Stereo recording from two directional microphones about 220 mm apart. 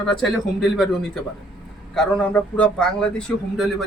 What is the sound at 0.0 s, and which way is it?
Speech, centre (ahead or behind).